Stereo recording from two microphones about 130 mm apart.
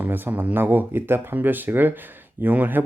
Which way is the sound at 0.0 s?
15° right (ahead or behind).